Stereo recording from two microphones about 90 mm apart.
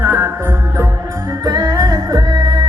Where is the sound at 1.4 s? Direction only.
40° right (ahead or behind).